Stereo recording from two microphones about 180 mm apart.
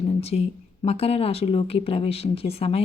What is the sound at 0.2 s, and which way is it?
A woman's voice, 35° left (ahead or behind).